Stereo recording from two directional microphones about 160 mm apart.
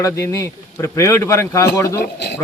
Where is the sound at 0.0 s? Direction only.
15° left (ahead or behind).